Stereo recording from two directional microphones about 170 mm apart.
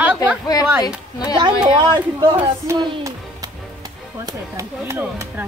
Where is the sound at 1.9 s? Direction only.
25° right (ahead or behind).